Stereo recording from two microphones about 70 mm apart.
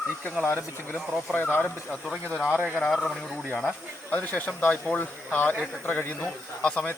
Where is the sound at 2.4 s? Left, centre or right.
Right.